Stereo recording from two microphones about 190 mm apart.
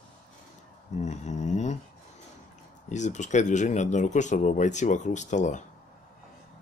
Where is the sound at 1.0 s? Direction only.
35° left (ahead or behind).